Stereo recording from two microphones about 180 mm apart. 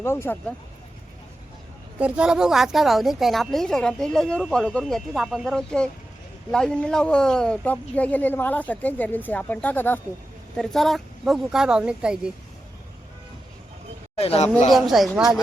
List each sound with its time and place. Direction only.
0.0 s speech: 15° left (ahead or behind)
2.0 s a woman's voice: 5° right (ahead or behind)
14.2 s a man's voice: 35° left (ahead or behind)
14.7 s a woman's voice: centre (ahead or behind)